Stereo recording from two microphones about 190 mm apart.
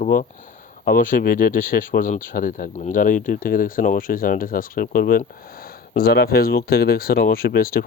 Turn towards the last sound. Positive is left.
turn(degrees=50)  # may be behind; listen again after turning